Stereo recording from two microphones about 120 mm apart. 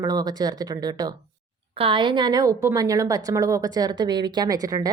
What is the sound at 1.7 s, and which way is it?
A woman's voice, 50° right (ahead or behind).